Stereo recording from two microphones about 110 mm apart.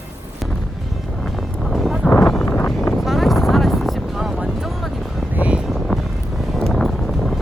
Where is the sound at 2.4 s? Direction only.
20° left (ahead or behind).